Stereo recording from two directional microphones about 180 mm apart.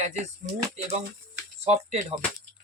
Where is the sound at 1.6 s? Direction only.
35° right (ahead or behind).